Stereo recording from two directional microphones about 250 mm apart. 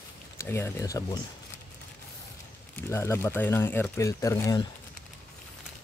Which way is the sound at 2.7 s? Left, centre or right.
Centre.